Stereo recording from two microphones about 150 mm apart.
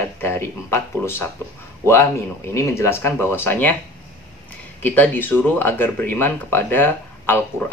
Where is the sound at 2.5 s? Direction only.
20° left (ahead or behind).